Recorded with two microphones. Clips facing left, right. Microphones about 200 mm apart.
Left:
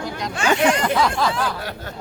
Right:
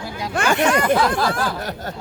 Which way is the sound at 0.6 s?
55° right (ahead or behind).